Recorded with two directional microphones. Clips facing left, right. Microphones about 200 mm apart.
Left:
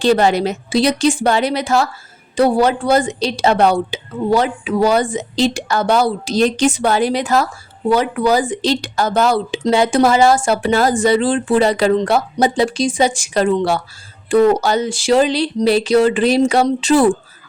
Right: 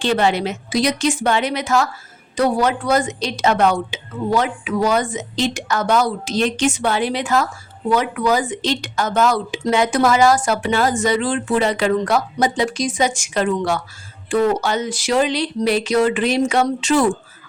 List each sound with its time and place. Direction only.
0.0 s a woman's voice: 40° left (ahead or behind)